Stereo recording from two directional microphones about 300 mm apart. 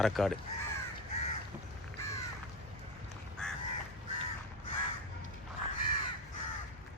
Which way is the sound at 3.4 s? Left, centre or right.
Centre.